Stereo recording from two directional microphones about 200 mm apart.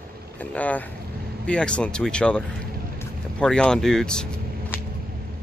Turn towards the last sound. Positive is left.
turn(degrees=5)  # may be behind; listen again after turning